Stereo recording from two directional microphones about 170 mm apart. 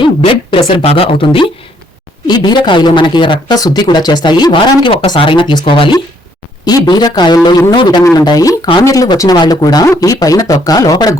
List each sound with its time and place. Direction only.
0.8 s speech: 35° left (ahead or behind)